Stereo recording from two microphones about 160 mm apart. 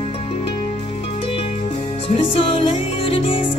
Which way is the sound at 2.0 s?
35° left (ahead or behind).